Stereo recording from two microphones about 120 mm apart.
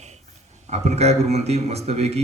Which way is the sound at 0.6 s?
70° right (ahead or behind).